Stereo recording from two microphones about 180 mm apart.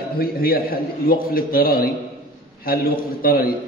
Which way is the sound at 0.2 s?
55° left (ahead or behind).